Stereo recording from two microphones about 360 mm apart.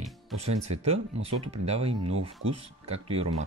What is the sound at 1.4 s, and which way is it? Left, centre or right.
Speech, right.